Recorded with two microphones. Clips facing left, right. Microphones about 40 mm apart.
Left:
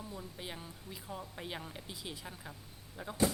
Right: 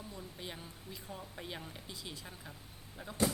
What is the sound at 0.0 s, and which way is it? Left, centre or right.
Speech, centre.